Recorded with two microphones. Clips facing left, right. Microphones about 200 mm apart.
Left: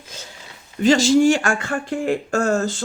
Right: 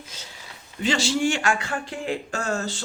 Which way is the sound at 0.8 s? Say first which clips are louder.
Left 9 dB; 45° left (ahead or behind).